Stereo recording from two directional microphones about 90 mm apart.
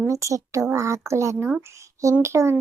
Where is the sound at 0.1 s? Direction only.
35° right (ahead or behind).